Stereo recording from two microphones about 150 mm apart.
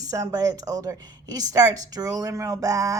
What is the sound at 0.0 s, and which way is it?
Speech, 20° right (ahead or behind).